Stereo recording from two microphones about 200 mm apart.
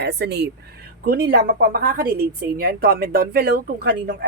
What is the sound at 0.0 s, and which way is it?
A woman's voice, 55° right (ahead or behind).